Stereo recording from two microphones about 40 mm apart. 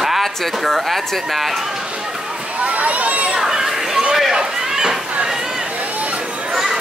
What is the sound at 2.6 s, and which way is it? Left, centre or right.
Speech, right.